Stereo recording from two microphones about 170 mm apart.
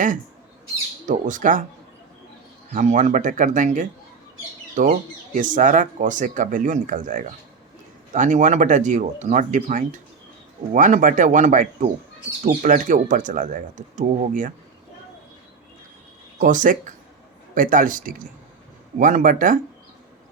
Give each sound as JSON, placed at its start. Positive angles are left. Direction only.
{"t": 1.0, "sound": "speech", "side_deg": -50}
{"t": 2.7, "sound": "speech", "side_deg": -45}
{"t": 16.4, "sound": "speech", "side_deg": -50}